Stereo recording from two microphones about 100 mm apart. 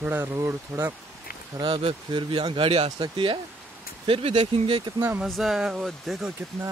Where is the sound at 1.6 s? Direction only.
55° right (ahead or behind).